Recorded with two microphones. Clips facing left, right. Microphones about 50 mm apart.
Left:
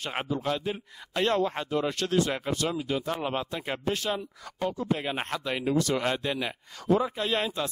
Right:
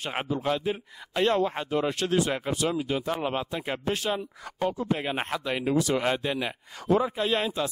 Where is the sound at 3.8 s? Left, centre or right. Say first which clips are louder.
Even; centre.